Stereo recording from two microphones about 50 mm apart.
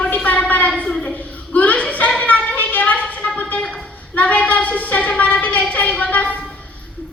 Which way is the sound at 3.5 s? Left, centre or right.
Centre.